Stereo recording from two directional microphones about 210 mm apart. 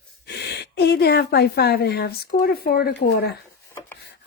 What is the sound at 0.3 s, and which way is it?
A woman's voice, 50° left (ahead or behind).